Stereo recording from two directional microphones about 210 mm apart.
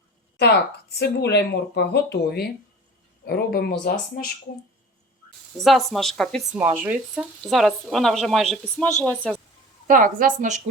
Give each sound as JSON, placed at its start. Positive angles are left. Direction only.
{"t": 0.9, "sound": "speech", "side_deg": 50}
{"t": 5.5, "sound": "a woman's voice", "side_deg": 0}
{"t": 9.8, "sound": "a woman's voice", "side_deg": -40}